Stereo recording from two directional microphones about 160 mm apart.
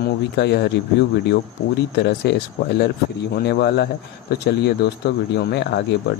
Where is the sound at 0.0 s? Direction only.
90° left.